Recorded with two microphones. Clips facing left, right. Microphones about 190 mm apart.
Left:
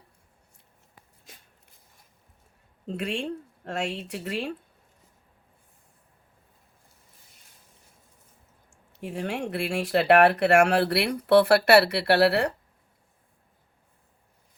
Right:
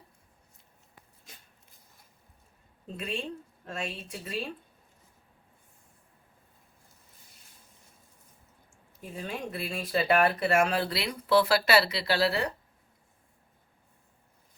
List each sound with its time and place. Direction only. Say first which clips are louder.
2.8 s speech: left 5 dB; 70° left (ahead or behind)
8.7 s speech: left 7 dB; 70° left (ahead or behind)